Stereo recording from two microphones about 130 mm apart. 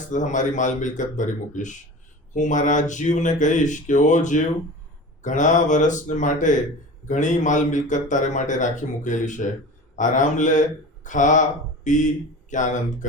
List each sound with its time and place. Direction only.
0.1 s a man's voice: 75° left (ahead or behind)